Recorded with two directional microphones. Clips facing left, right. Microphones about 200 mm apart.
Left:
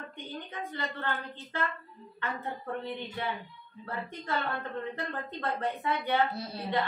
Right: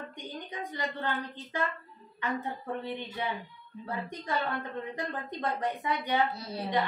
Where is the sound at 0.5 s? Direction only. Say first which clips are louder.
Right 1 dB; 15° right (ahead or behind).